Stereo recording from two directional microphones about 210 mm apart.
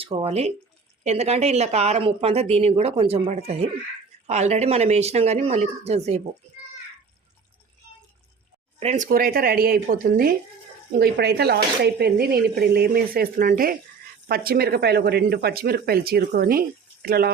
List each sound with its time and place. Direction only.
0.0 s a woman's voice: 30° right (ahead or behind)
8.8 s speech: 35° right (ahead or behind)